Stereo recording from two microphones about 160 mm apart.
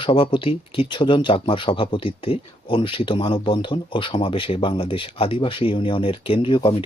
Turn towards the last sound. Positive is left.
turn(degrees=30)  # may be behind; listen again after turning